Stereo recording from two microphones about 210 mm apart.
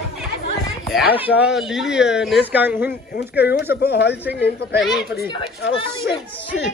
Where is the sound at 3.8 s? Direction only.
55° left (ahead or behind).